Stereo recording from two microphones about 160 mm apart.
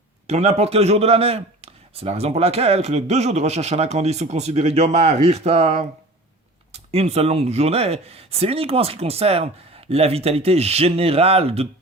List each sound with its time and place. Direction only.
0.3 s a man's voice: 40° right (ahead or behind)
6.9 s a man's voice: 40° right (ahead or behind)